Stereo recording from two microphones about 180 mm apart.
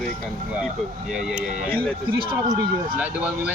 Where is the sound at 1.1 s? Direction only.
5° right (ahead or behind).